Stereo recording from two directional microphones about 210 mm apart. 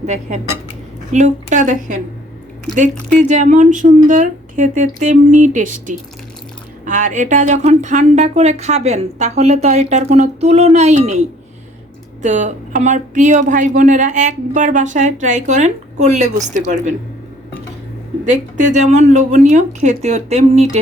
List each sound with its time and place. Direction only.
0.0 s speech: 35° right (ahead or behind)
3.2 s speech: 35° right (ahead or behind)
18.3 s speech: 35° right (ahead or behind)